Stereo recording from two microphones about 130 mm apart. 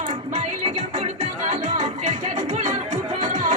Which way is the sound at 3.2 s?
70° right (ahead or behind).